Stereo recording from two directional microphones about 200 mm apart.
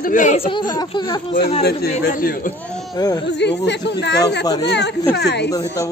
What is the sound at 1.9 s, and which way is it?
Speech, 45° left (ahead or behind).